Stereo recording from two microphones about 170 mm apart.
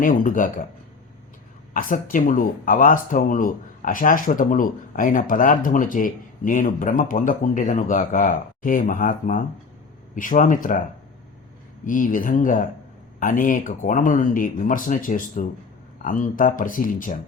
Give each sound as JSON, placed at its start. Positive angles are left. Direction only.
{"t": 0.0, "sound": "speech", "side_deg": 50}
{"t": 1.7, "sound": "speech", "side_deg": 55}
{"t": 11.9, "sound": "speech", "side_deg": 50}